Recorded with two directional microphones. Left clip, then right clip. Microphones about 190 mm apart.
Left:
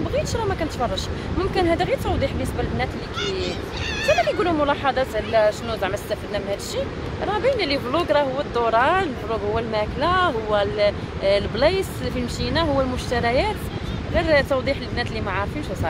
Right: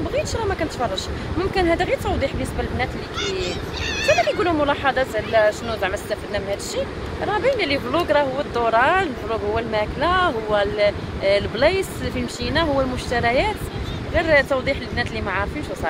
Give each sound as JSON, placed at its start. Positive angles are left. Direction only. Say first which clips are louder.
{"t": 1.5, "sound": "speech", "louder": "right 1 dB", "side_deg": 15}
{"t": 4.0, "sound": "speech", "louder": "right 1 dB", "side_deg": 55}
{"t": 4.3, "sound": "speech", "louder": "right 1 dB", "side_deg": 15}